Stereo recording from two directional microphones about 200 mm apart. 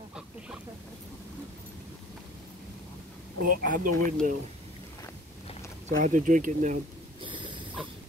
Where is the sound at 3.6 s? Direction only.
45° right (ahead or behind).